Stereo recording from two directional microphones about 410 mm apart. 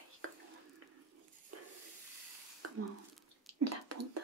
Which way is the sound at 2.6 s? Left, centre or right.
Right.